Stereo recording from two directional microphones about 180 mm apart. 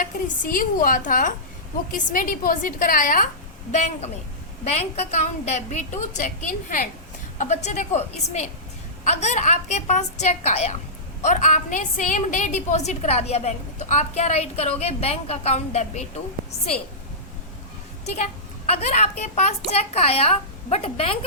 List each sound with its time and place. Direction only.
0.0 s a woman's voice: 50° left (ahead or behind)
18.0 s a sound: 35° left (ahead or behind)
19.4 s a woman's voice: 35° left (ahead or behind)